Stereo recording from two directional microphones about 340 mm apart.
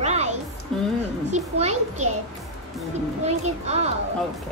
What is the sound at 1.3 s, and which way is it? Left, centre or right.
Speech, centre.